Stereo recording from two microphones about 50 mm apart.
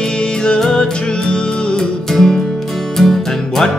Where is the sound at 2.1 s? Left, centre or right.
Centre.